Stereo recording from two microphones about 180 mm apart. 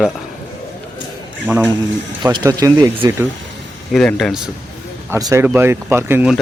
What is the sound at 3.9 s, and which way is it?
Speech, centre (ahead or behind).